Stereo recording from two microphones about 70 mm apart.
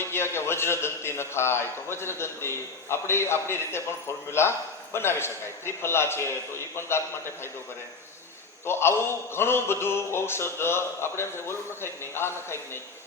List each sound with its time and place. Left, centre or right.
0.0 s a man's voice: left
8.6 s a man's voice: left